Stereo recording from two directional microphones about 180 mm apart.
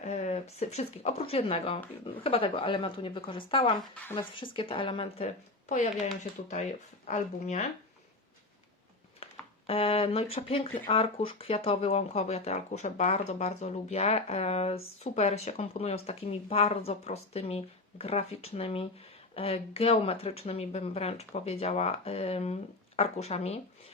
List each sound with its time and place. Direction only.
0.0 s a sound: 40° left (ahead or behind)
0.6 s speech: 35° left (ahead or behind)
7.1 s speech: 40° left (ahead or behind)
9.2 s speech: 30° left (ahead or behind)